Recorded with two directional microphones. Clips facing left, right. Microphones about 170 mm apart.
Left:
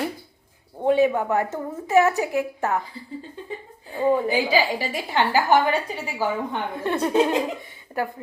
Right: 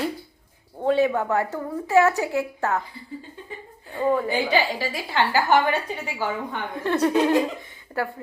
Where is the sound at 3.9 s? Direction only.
10° left (ahead or behind).